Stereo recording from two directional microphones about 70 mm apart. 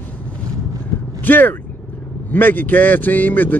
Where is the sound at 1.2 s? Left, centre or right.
Left.